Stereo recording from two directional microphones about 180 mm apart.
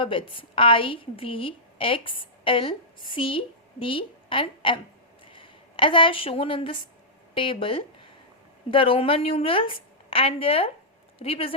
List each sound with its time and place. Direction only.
0.0 s a woman's voice: 30° left (ahead or behind)